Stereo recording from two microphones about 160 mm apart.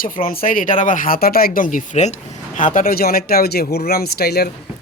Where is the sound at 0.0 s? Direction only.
60° left (ahead or behind).